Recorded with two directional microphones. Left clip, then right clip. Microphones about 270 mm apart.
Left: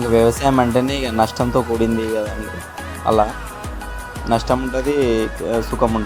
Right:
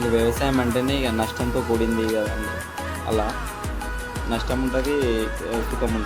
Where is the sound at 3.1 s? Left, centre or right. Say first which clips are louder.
Left 9 dB; left.